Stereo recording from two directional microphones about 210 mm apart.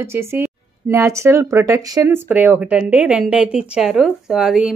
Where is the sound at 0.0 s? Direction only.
10° right (ahead or behind).